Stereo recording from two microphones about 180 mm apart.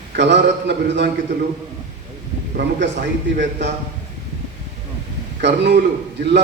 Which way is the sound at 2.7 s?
75° right (ahead or behind).